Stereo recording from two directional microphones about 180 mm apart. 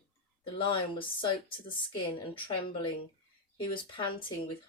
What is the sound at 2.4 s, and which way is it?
Speech, 30° left (ahead or behind).